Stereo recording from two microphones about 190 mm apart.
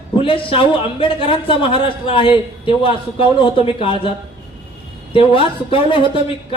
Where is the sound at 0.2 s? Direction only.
25° left (ahead or behind).